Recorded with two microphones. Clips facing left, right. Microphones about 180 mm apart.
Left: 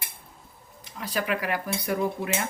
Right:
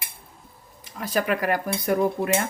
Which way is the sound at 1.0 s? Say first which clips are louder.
Right 4 dB; 45° right (ahead or behind).